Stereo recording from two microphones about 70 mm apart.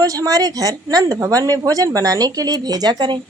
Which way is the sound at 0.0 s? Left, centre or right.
Right.